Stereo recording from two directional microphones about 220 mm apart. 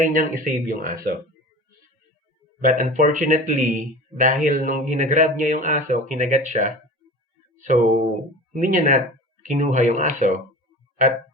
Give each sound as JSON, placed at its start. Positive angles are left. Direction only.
{"t": 0.0, "sound": "a man's voice", "side_deg": -40}
{"t": 2.6, "sound": "a man's voice", "side_deg": -35}
{"t": 7.5, "sound": "a sound", "side_deg": -35}
{"t": 8.5, "sound": "a man's voice", "side_deg": -35}